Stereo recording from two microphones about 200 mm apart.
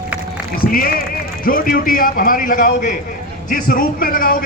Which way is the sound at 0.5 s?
45° left (ahead or behind).